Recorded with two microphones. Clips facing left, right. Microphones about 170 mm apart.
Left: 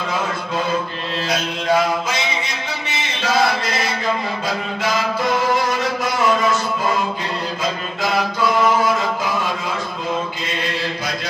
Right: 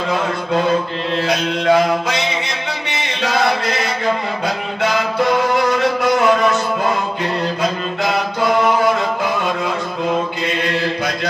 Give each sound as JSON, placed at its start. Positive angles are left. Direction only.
{"t": 1.2, "sound": "mantra", "side_deg": -65}